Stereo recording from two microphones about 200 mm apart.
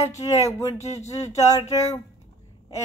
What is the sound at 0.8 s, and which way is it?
Speech, 35° left (ahead or behind).